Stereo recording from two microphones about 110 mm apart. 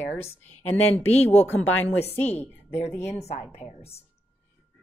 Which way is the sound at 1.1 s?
70° left (ahead or behind).